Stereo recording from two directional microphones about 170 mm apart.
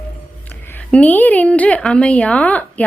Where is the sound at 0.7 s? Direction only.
10° left (ahead or behind).